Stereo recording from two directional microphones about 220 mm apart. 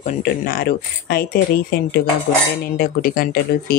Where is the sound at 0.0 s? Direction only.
45° left (ahead or behind).